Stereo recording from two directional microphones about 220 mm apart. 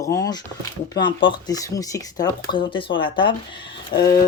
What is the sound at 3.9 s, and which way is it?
Speech, 40° left (ahead or behind).